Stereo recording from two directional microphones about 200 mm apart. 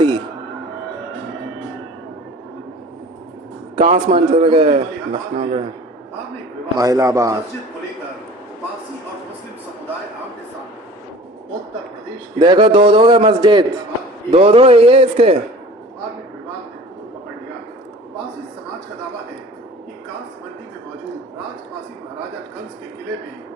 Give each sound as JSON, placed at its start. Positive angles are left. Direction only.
{"t": 3.8, "sound": "a man's voice", "side_deg": -30}
{"t": 6.7, "sound": "a man's voice", "side_deg": -15}
{"t": 12.4, "sound": "a man's voice", "side_deg": -25}